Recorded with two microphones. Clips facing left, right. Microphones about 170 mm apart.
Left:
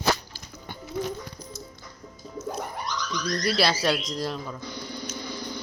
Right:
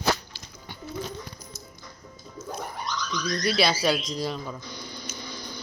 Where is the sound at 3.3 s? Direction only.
Centre (ahead or behind).